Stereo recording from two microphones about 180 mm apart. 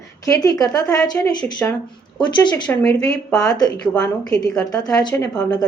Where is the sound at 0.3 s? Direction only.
20° left (ahead or behind).